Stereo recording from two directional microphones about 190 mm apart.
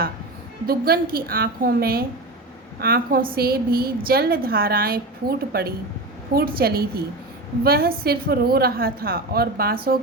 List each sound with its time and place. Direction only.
0.7 s a woman's voice: 50° right (ahead or behind)